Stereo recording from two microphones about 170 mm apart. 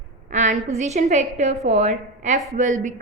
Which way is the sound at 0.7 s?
45° right (ahead or behind).